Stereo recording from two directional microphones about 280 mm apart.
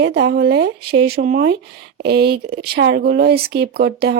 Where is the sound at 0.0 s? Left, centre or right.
Right.